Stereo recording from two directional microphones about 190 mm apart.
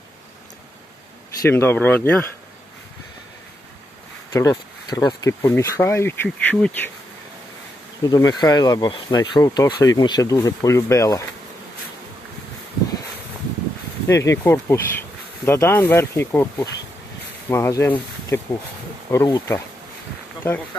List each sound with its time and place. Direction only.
1.4 s speech: 10° left (ahead or behind)
4.3 s speech: 15° left (ahead or behind)
8.0 s speech: 20° left (ahead or behind)
14.1 s speech: 15° left (ahead or behind)